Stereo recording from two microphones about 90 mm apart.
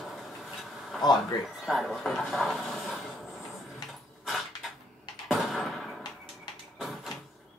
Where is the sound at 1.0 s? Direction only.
50° left (ahead or behind).